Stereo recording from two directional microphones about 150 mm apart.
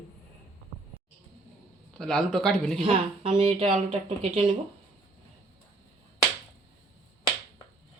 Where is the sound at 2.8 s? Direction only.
40° right (ahead or behind).